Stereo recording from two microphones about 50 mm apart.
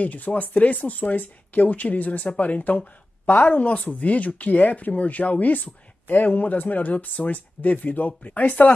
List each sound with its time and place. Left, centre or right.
0.0 s speech: left